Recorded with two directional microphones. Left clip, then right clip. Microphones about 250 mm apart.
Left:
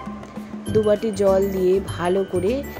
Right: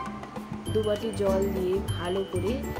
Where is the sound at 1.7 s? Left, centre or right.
Left.